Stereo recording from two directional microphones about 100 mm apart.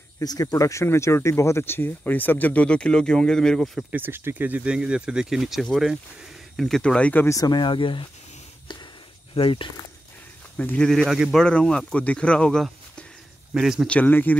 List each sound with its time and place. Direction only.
0.2 s speech: 40° left (ahead or behind); by 3.8 s centre (ahead or behind)
3.9 s speech: 20° right (ahead or behind); by 7.2 s 15° left (ahead or behind)
7.2 s speech: 40° left (ahead or behind); by 8.0 s 55° left (ahead or behind)
9.3 s speech: 60° left (ahead or behind)
10.6 s speech: 15° left (ahead or behind)
10.9 s speech: 5° left (ahead or behind)
13.6 s speech: 5° right (ahead or behind)
13.8 s speech: 15° left (ahead or behind)